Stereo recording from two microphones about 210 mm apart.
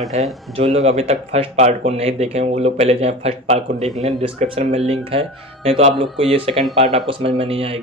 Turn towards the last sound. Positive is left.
turn(degrees=-25)  # may be behind; listen again after turning